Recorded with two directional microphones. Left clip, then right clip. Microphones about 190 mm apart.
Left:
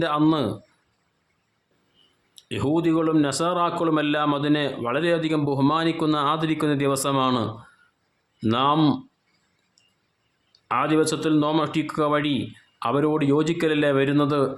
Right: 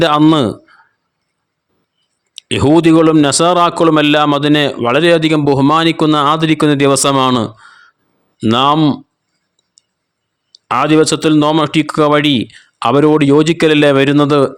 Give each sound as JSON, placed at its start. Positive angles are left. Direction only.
{"t": 0.0, "sound": "a man's voice", "side_deg": -50}
{"t": 2.3, "sound": "a man's voice", "side_deg": -50}
{"t": 10.5, "sound": "a man's voice", "side_deg": -50}